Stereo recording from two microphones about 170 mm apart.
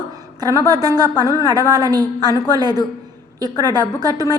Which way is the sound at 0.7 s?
20° right (ahead or behind).